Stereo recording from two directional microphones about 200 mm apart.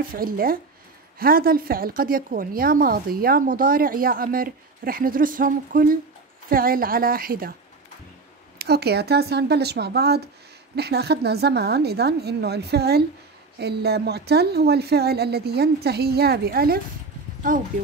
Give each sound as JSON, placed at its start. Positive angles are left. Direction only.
{"t": 0.1, "sound": "a woman's voice", "side_deg": -45}
{"t": 8.5, "sound": "a woman's voice", "side_deg": -55}